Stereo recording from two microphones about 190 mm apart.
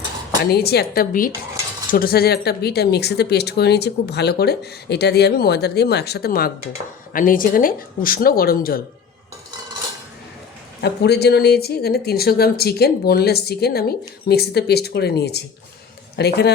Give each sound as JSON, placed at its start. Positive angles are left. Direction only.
{"t": 0.5, "sound": "speech", "side_deg": 55}
{"t": 10.8, "sound": "speech", "side_deg": 60}